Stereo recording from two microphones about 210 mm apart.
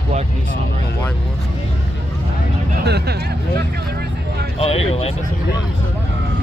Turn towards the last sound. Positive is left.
turn(degrees=30)  # may be behind; listen again after turning